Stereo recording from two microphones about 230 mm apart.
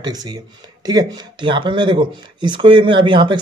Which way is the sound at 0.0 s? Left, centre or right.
Centre.